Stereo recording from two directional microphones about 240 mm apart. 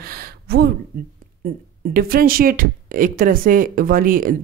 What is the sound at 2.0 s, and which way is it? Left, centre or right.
A woman's voice, right.